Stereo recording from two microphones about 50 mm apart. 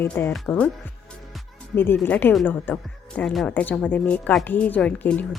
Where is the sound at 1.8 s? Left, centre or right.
Left.